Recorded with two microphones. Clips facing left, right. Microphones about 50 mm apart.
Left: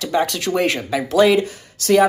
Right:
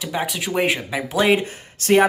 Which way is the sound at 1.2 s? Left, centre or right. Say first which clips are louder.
Left 3 dB; right.